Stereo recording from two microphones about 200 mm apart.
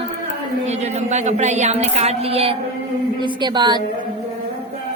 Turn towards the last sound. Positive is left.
turn(degrees=-20)  # may be behind; listen again after turning